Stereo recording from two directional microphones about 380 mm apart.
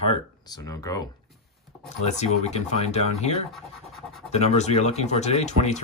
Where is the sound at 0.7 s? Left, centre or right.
Centre.